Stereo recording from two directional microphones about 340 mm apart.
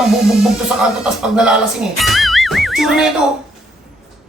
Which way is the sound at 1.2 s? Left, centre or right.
Centre.